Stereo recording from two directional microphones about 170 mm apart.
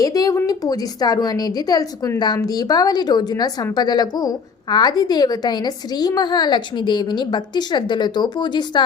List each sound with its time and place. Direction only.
0.0 s a woman's voice: 20° left (ahead or behind)